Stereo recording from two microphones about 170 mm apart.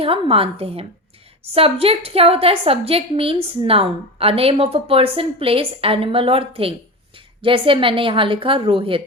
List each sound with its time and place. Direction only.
0.0 s a woman's voice: 35° right (ahead or behind)